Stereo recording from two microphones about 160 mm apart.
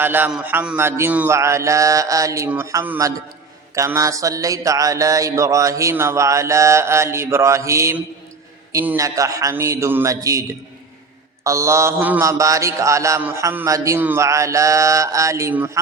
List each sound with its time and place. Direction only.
0.0 s a sound: 15° right (ahead or behind)
3.8 s mantra: 20° right (ahead or behind)
11.4 s mantra: 20° right (ahead or behind)